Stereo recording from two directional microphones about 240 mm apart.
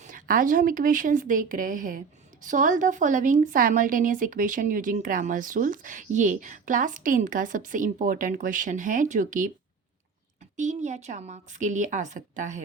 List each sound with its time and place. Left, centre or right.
0.0 s a woman's voice: right
10.6 s a woman's voice: right